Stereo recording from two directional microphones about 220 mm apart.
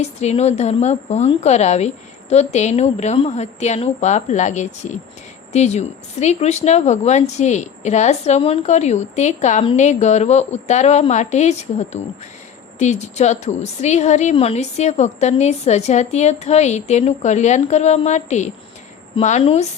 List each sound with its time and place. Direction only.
0.0 s a woman's voice: 30° left (ahead or behind)